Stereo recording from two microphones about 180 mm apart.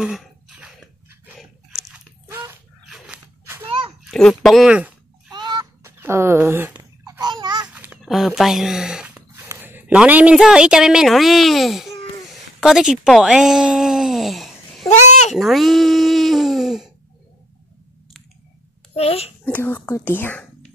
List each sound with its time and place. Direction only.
0.0 s chewing: 5° right (ahead or behind)
2.2 s dog: 15° right (ahead or behind)
2.9 s a sound: 10° right (ahead or behind)
3.6 s a sound: 30° right (ahead or behind)
4.0 s a woman's voice: centre (ahead or behind)
5.3 s a sound: 25° right (ahead or behind)
5.9 s babbling: 15° right (ahead or behind)
7.6 s a sound: 10° right (ahead or behind)
9.5 s a woman's voice: 10° right (ahead or behind)
14.9 s speech: 40° left (ahead or behind)
15.3 s speech: centre (ahead or behind)
18.9 s a child's voice: 35° left (ahead or behind)
19.4 s speech: 10° left (ahead or behind)